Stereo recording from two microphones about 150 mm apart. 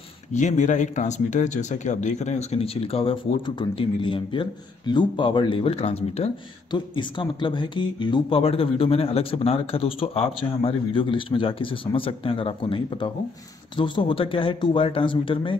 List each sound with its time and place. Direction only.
0.3 s speech: 55° left (ahead or behind)
6.7 s speech: 30° left (ahead or behind)